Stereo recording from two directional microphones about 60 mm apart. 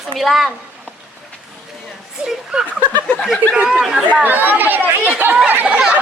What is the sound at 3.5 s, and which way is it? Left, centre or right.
Speech, right.